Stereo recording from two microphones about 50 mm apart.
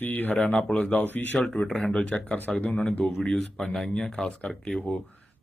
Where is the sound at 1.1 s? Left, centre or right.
Left.